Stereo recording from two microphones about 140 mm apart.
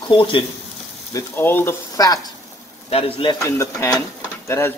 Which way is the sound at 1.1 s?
15° left (ahead or behind).